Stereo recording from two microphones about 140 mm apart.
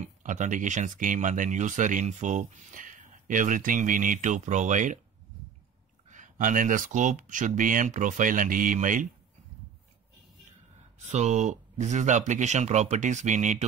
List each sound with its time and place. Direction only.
0.0 s speech: 60° right (ahead or behind)
6.0 s speech: 60° right (ahead or behind)
11.0 s speech: 55° right (ahead or behind)